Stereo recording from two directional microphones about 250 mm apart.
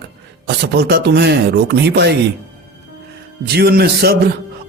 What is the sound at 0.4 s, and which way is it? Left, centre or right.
A man's voice, right.